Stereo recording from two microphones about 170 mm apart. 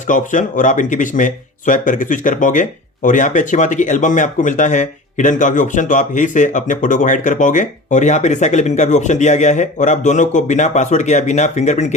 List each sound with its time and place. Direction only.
0.1 s speech: 50° left (ahead or behind)